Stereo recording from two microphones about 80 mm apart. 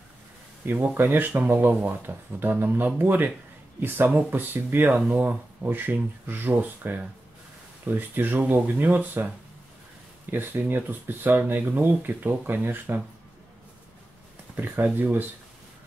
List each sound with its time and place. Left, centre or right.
0.7 s speech: right
10.3 s speech: right
14.5 s speech: right